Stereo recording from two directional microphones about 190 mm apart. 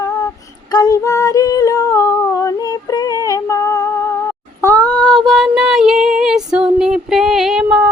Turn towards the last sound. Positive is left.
turn(degrees=-5)  # may be behind; listen again after turning